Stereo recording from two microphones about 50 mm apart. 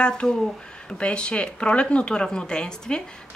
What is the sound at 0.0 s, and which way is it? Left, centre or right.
Speech, centre.